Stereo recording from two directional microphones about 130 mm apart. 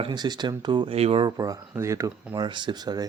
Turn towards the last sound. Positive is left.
turn(degrees=-30)  # may be behind; listen again after turning